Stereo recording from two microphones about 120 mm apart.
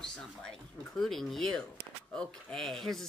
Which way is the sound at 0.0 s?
5° left (ahead or behind).